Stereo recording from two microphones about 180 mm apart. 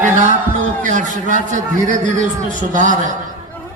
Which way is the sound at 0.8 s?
45° right (ahead or behind).